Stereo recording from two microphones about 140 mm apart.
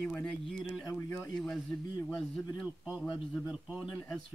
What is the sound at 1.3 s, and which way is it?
Speech, 5° left (ahead or behind).